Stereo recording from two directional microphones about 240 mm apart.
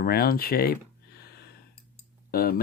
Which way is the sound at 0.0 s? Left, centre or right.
Left.